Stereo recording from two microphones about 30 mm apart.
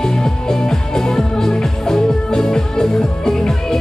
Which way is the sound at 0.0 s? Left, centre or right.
Left.